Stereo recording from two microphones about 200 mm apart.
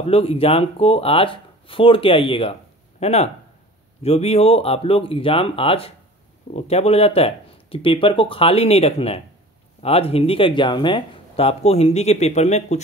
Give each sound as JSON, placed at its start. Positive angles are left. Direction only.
{"t": 0.0, "sound": "speech", "side_deg": 30}